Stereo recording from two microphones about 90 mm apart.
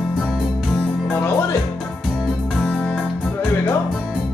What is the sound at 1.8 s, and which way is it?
Music, centre (ahead or behind).